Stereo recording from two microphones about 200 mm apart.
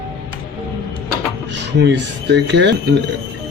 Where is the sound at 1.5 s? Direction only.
60° right (ahead or behind).